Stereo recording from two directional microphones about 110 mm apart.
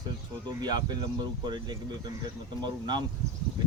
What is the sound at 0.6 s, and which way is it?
Speech, 40° right (ahead or behind).